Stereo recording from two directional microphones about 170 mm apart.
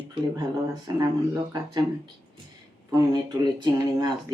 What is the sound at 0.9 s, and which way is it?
Speech, 20° right (ahead or behind).